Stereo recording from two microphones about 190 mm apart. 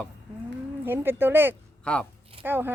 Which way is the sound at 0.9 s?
10° right (ahead or behind).